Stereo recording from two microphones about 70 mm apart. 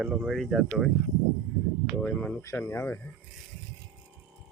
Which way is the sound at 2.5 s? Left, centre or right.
Left.